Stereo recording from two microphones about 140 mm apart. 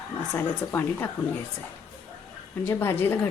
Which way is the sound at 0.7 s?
15° left (ahead or behind).